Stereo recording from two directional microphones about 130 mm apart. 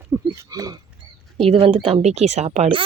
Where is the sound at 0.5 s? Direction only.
30° right (ahead or behind).